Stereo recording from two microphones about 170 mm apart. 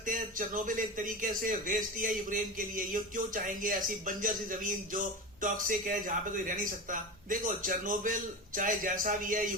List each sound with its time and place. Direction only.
0.0 s speech: 50° right (ahead or behind)